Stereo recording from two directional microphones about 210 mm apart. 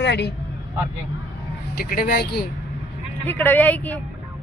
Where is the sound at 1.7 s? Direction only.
45° left (ahead or behind).